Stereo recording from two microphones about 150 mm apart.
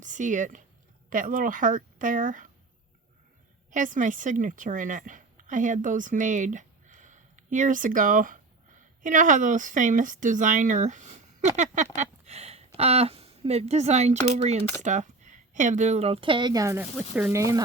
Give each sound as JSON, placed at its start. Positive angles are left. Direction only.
{"t": 0.0, "sound": "a woman's voice", "side_deg": -55}
{"t": 3.7, "sound": "a woman's voice", "side_deg": -60}
{"t": 16.7, "sound": "speech", "side_deg": -10}